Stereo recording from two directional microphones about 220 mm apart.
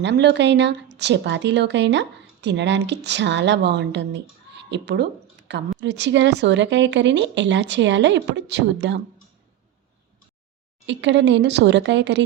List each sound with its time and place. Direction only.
0.0 s a woman's voice: 50° right (ahead or behind)
10.8 s a woman's voice: 55° right (ahead or behind)